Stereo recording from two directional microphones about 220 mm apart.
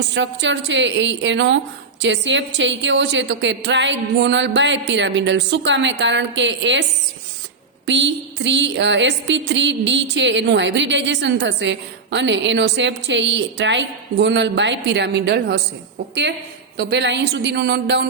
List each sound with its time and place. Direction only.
0.1 s a woman's voice: 55° right (ahead or behind)
7.9 s a woman's voice: 55° right (ahead or behind)
16.7 s a woman's voice: 50° right (ahead or behind)